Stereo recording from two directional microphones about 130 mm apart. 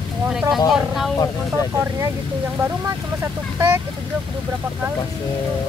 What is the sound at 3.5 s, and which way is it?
Speech, 20° right (ahead or behind).